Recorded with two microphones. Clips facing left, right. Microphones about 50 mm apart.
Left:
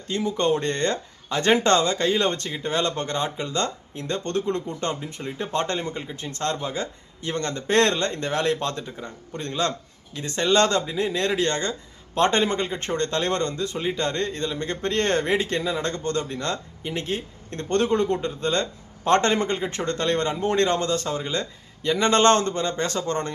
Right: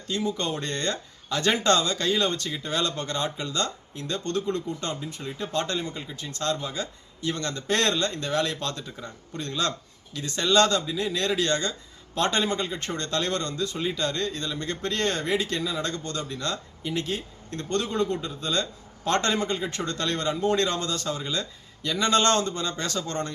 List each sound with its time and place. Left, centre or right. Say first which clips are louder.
0.1 s speech: left 5 dB; left